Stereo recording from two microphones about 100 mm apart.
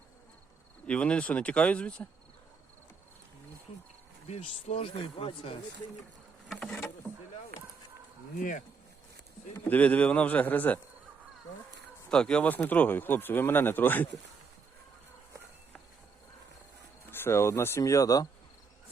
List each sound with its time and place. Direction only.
0.9 s speech: 10° left (ahead or behind)
4.3 s speech: 80° left
9.6 s speech: 15° left (ahead or behind)
12.1 s speech: 10° left (ahead or behind)
17.1 s speech: 25° left (ahead or behind)